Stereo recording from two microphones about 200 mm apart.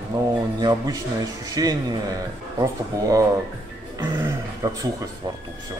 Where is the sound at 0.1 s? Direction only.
20° right (ahead or behind).